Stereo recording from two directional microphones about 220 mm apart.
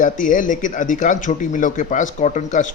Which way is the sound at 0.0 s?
35° left (ahead or behind).